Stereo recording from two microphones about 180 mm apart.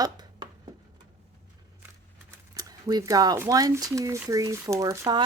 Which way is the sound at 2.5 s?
20° right (ahead or behind).